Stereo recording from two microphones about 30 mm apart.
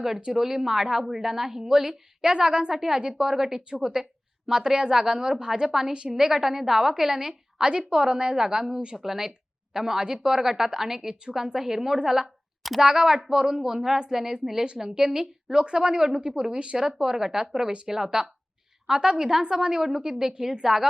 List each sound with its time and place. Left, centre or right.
0.3 s a woman's voice: centre
2.3 s a woman's voice: right
2.7 s a woman's voice: centre
3.0 s a woman's voice: right
4.4 s a woman's voice: right
7.6 s a woman's voice: right
9.0 s a woman's voice: centre
15.6 s speech: right
16.0 s a woman's voice: centre
16.3 s speech: right
16.7 s a woman's voice: centre
18.9 s a woman's voice: right